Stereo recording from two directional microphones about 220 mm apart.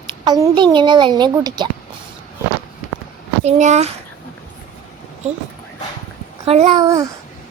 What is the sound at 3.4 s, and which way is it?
Speech, 30° right (ahead or behind).